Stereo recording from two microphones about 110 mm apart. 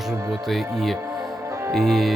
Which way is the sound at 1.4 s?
25° right (ahead or behind).